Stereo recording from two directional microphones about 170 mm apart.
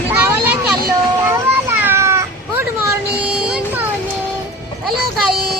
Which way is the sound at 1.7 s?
15° right (ahead or behind).